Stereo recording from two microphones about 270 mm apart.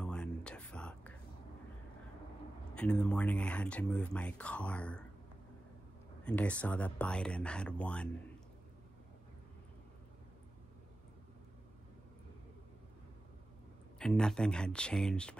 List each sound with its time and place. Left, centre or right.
0.0 s a sound: centre
2.7 s speech: centre
6.2 s speech: centre
13.9 s speech: centre